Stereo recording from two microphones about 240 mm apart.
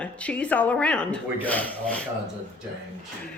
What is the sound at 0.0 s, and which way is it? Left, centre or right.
Speech, centre.